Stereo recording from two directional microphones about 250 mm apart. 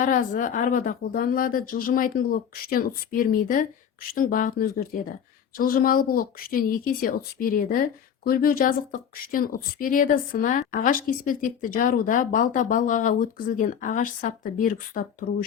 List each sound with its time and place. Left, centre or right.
0.0 s speech: left